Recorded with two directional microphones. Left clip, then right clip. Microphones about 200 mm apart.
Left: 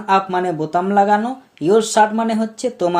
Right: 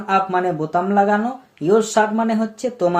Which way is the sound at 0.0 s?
35° left (ahead or behind).